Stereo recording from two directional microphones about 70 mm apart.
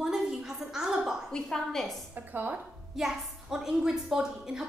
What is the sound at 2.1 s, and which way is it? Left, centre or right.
Speech, right.